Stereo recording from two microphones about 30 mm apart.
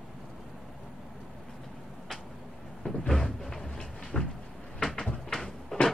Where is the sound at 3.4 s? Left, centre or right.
Centre.